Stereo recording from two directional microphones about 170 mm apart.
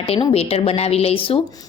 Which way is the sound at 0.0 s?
30° left (ahead or behind).